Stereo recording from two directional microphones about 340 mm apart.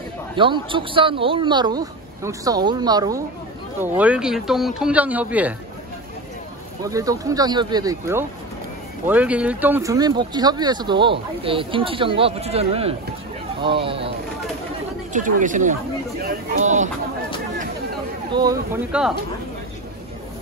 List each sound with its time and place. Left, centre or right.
0.4 s speech: centre
6.8 s speech: centre
15.1 s speech: right
18.3 s speech: centre